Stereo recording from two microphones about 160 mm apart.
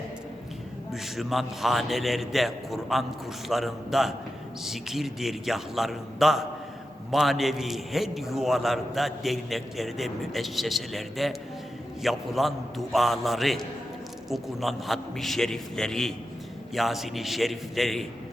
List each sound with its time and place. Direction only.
0.9 s a man's voice: centre (ahead or behind)